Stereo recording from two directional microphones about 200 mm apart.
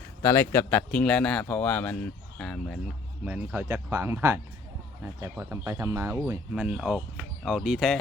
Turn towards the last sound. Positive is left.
turn(degrees=0)  # may be behind; listen again after turning